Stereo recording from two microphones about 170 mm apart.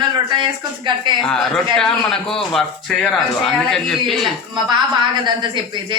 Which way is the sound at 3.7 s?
Centre (ahead or behind).